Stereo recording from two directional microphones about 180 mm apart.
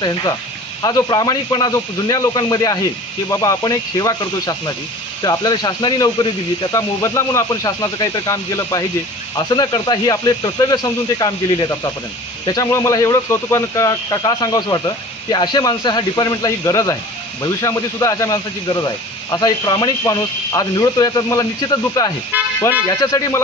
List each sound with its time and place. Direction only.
0.0 s speech: 20° left (ahead or behind)